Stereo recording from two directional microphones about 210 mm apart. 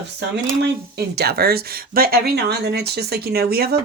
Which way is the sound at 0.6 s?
50° right (ahead or behind).